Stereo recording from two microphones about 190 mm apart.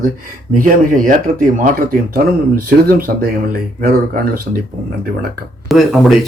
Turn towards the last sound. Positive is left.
turn(degrees=0)  # may be behind; listen again after turning